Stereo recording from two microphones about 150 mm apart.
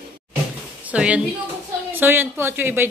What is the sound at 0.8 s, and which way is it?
A woman's voice, 10° right (ahead or behind).